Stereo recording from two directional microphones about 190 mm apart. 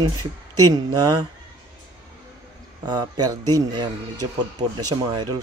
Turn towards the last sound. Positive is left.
turn(degrees=-25)  # may be behind; listen again after turning